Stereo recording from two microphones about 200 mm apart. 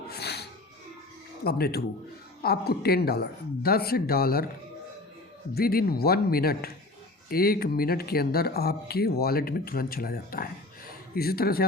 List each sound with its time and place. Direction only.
0.1 s music: 55° left (ahead or behind)
1.5 s speech: 50° left (ahead or behind)
5.5 s speech: 50° left (ahead or behind)